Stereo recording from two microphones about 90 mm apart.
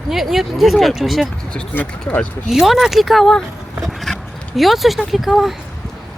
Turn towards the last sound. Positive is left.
turn(degrees=0)  # may be behind; listen again after turning